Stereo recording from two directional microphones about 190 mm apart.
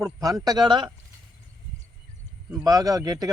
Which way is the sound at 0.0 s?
15° right (ahead or behind).